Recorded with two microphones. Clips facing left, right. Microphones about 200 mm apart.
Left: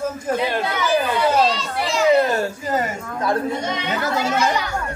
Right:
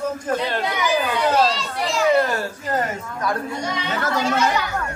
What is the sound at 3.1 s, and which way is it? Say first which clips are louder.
Speech: left 5 dB; 25° left (ahead or behind).